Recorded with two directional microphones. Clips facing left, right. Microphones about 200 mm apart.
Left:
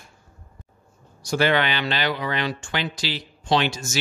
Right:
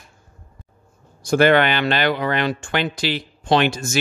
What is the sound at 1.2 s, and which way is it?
Speech, 55° right (ahead or behind).